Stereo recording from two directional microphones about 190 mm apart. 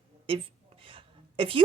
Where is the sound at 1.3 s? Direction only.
30° right (ahead or behind).